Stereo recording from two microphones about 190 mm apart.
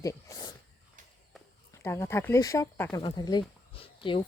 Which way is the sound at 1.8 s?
15° left (ahead or behind).